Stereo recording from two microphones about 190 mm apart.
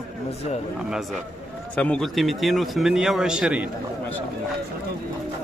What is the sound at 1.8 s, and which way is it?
Speech, 5° left (ahead or behind).